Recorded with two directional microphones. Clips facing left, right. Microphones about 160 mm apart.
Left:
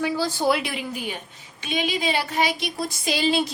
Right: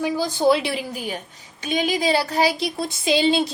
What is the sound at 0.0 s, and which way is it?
A woman's voice, 15° right (ahead or behind).